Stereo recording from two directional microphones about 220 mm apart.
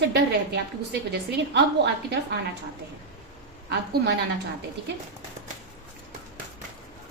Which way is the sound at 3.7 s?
50° right (ahead or behind).